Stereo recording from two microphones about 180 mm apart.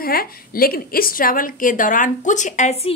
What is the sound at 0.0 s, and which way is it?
A woman's voice, 55° left (ahead or behind).